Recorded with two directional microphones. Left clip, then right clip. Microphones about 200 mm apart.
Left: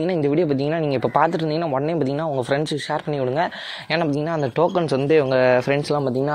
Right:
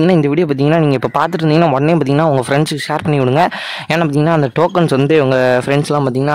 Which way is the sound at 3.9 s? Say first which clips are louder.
Right 8 dB; 30° right (ahead or behind).